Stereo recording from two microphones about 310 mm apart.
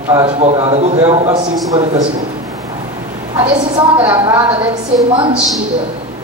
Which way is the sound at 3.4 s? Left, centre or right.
Centre.